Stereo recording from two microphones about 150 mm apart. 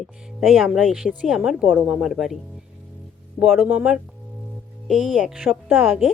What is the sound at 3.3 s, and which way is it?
A woman's voice, 5° right (ahead or behind).